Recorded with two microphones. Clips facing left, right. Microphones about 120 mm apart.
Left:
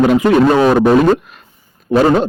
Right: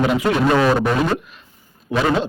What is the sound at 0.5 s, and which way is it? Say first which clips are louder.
Speech: left 7 dB; 30° left (ahead or behind).